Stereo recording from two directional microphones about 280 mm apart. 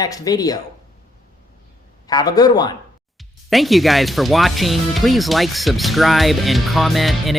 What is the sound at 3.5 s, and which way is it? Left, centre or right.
Speech, centre.